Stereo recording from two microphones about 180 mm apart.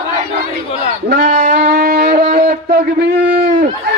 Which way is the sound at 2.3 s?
55° right (ahead or behind).